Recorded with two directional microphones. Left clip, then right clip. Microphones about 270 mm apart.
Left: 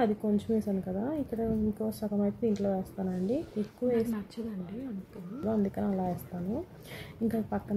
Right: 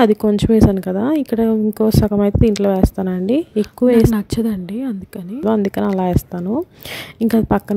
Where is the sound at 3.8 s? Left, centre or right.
Right.